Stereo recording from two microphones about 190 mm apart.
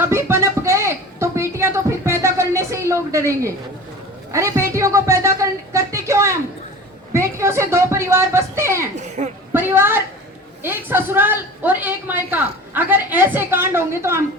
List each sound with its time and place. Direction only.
0.0 s music: 15° right (ahead or behind)
4.3 s a woman's voice: 15° right (ahead or behind)
9.0 s speech: 35° right (ahead or behind)
9.5 s a woman's voice: 10° right (ahead or behind)